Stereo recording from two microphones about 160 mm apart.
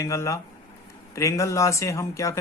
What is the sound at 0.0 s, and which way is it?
Speech, 20° left (ahead or behind).